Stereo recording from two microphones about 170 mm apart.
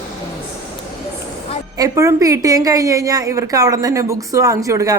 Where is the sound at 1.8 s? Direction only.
20° right (ahead or behind).